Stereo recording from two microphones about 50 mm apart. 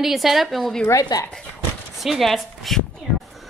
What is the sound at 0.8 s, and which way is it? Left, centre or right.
Speech, left.